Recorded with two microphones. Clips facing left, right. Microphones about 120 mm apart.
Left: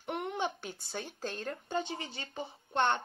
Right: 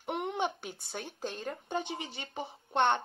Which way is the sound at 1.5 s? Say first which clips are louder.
Left 1 dB; 20° right (ahead or behind).